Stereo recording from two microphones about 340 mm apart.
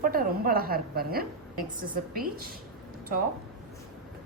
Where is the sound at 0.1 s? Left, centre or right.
Right.